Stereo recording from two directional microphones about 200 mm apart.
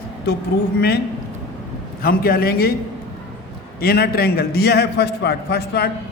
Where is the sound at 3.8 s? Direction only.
50° left (ahead or behind).